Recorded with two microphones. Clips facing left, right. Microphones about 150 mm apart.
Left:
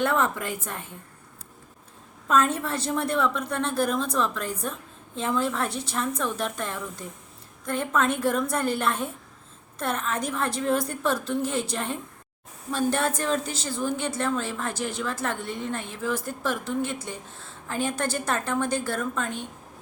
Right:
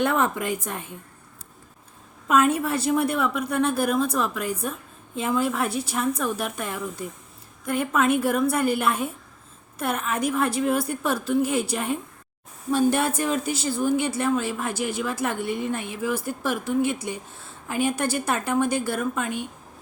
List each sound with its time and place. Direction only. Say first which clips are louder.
0.0 s a woman's voice: right 2 dB; 15° right (ahead or behind)
2.2 s a woman's voice: right 3 dB; 10° right (ahead or behind)